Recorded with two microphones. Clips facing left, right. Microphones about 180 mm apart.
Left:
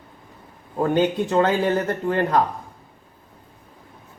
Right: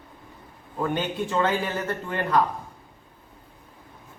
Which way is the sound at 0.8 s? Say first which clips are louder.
Left 7 dB; 40° left (ahead or behind).